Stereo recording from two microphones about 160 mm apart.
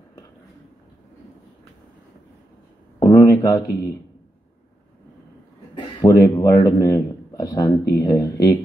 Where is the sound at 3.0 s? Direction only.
25° left (ahead or behind).